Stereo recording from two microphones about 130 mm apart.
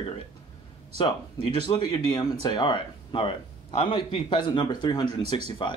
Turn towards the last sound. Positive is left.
turn(degrees=40)  # may be behind; listen again after turning